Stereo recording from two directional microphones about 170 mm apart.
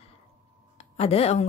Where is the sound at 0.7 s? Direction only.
35° left (ahead or behind).